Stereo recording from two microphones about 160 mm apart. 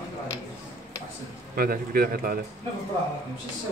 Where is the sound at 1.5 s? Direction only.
65° right (ahead or behind).